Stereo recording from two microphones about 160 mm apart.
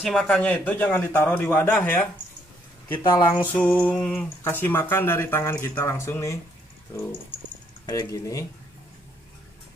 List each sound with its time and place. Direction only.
0.0 s speech: centre (ahead or behind)
2.9 s speech: 25° left (ahead or behind)
3.5 s speech: 10° left (ahead or behind)
7.8 s speech: 25° left (ahead or behind)